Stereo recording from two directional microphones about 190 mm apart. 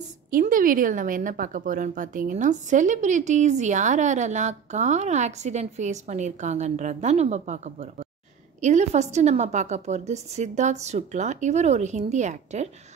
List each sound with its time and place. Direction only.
0.3 s a woman's voice: 45° right (ahead or behind)